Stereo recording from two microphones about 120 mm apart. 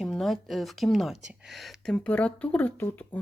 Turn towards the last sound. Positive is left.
turn(degrees=15)  # may be behind; listen again after turning